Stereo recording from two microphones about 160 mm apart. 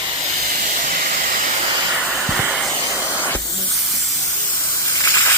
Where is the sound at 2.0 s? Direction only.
5° right (ahead or behind).